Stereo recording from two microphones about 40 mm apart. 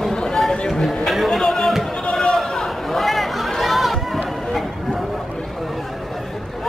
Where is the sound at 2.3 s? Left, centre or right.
Centre.